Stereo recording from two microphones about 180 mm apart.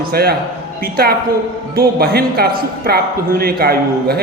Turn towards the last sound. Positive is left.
turn(degrees=-60)  # may be behind; listen again after turning